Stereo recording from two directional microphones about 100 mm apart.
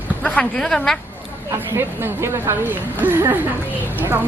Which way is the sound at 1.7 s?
25° right (ahead or behind).